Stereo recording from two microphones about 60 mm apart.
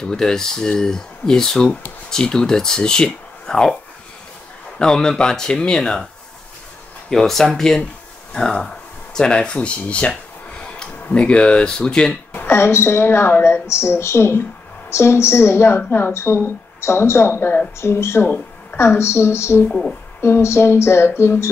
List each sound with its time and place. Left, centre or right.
0.0 s speech: centre
4.7 s speech: centre
7.1 s speech: centre
12.4 s a woman's voice: left
19.7 s speech: centre
20.2 s a woman's voice: left